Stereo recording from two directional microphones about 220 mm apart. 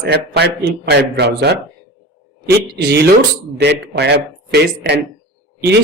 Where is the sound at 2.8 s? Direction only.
50° right (ahead or behind).